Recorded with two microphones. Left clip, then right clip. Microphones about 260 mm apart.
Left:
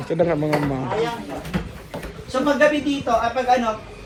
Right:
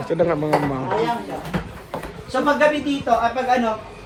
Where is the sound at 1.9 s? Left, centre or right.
Centre.